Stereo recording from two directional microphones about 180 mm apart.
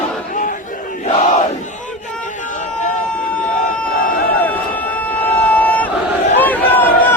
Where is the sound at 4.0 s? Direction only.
55° left (ahead or behind).